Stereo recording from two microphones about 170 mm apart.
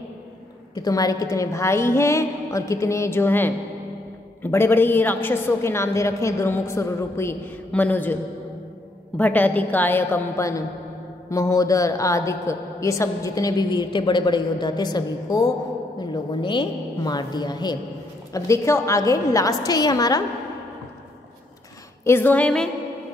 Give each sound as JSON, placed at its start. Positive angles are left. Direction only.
{"t": 0.7, "sound": "a woman's voice", "side_deg": 20}
{"t": 22.0, "sound": "a woman's voice", "side_deg": 15}